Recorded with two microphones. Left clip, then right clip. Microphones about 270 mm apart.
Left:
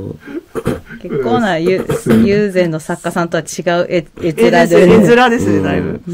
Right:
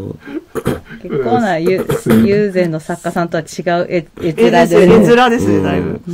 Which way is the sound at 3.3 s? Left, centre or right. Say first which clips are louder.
Left 1 dB; centre.